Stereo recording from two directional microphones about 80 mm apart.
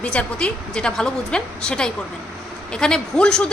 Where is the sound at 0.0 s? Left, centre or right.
Centre.